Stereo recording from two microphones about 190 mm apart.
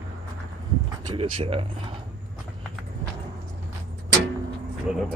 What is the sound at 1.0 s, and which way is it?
Speech, 25° right (ahead or behind).